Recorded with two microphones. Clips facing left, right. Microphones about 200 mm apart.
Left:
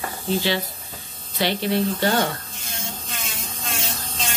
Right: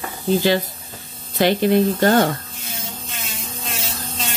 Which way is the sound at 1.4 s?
50° right (ahead or behind).